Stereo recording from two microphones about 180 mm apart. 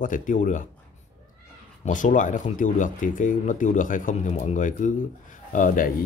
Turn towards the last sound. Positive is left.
turn(degrees=50)  # may be behind; listen again after turning